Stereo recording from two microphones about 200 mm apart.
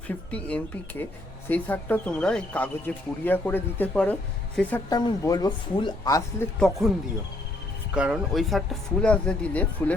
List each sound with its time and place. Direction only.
0.3 s speech: 5° left (ahead or behind)
4.9 s speech: 20° left (ahead or behind)
6.6 s speech: centre (ahead or behind)
7.9 s speech: 5° right (ahead or behind)